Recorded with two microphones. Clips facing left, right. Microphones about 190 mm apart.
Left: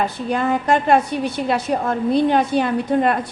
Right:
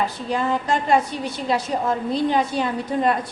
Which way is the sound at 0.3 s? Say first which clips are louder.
Left 4 dB; 60° left (ahead or behind).